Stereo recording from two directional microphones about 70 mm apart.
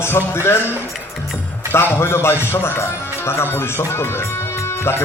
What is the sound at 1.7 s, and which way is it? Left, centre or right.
A man's voice, left.